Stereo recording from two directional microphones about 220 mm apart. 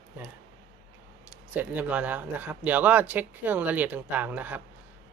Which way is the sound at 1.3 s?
5° right (ahead or behind).